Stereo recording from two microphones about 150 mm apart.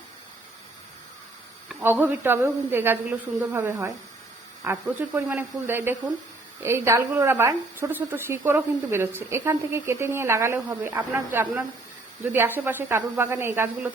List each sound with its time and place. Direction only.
1.8 s a woman's voice: 15° right (ahead or behind)